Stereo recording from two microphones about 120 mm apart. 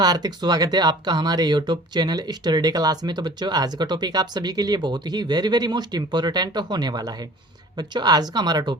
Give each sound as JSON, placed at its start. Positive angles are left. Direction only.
{"t": 0.0, "sound": "speech", "side_deg": -35}